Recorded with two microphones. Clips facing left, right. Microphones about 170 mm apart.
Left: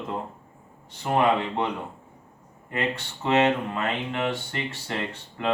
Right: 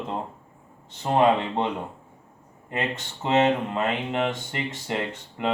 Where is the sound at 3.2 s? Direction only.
20° right (ahead or behind).